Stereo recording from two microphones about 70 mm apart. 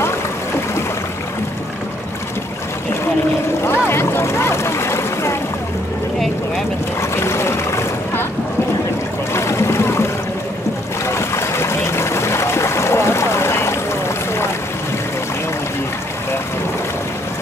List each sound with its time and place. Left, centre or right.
3.6 s boat: left
7.0 s boat: left
9.3 s boat: left
11.1 s a sound: left